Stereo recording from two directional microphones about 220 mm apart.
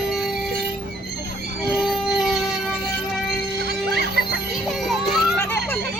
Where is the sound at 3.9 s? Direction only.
45° right (ahead or behind).